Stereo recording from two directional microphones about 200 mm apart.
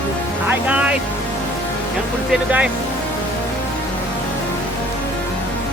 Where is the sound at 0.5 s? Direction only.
5° right (ahead or behind).